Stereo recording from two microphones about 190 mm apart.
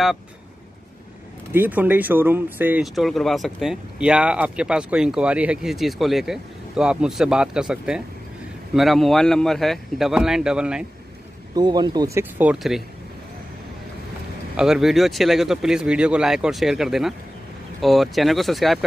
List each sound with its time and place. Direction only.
1.5 s speech: 10° right (ahead or behind)
11.5 s speech: 20° right (ahead or behind); by 12.8 s 5° right (ahead or behind)
14.6 s speech: centre (ahead or behind)